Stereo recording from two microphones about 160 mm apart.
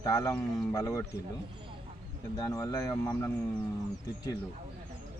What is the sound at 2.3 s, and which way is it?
Speech, 20° left (ahead or behind).